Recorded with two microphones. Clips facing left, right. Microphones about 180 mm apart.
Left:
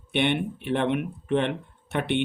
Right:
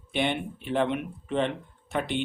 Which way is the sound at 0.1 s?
65° left (ahead or behind).